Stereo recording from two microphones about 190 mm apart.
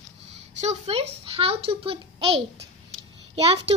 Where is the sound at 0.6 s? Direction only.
35° right (ahead or behind).